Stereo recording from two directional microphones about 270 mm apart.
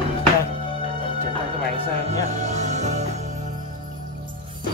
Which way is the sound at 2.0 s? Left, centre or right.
Right.